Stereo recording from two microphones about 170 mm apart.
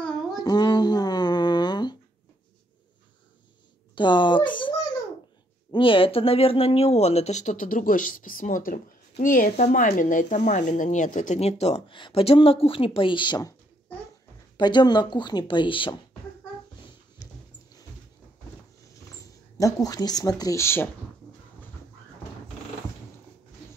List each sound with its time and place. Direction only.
0.4 s a sound: 25° left (ahead or behind)
3.9 s speech: 30° left (ahead or behind)
14.6 s speech: 25° left (ahead or behind)
19.1 s speech: 20° left (ahead or behind)